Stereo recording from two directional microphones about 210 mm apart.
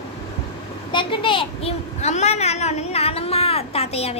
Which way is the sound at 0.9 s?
25° left (ahead or behind).